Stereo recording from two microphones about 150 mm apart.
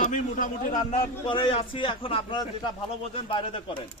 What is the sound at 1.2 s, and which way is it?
A man's voice, 35° left (ahead or behind).